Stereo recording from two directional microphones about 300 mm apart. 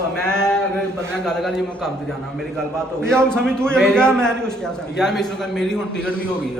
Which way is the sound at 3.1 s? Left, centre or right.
Centre.